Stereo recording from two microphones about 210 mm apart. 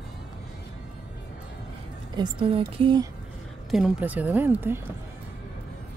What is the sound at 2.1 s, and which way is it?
Speech, 25° right (ahead or behind).